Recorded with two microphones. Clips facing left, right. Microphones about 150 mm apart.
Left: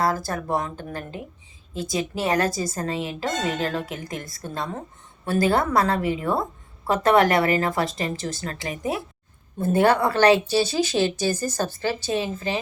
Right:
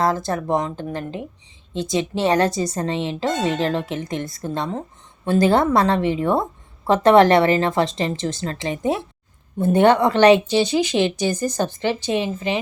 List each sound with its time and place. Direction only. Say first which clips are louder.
0.0 s speech: right 3 dB; 25° right (ahead or behind)